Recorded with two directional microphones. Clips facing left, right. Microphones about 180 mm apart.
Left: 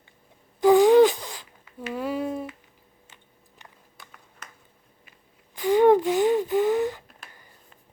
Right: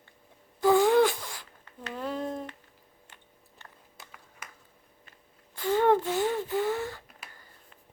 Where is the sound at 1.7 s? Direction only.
10° left (ahead or behind).